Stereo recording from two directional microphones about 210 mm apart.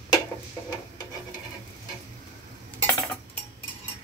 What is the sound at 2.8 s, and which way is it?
Dishes, 15° left (ahead or behind).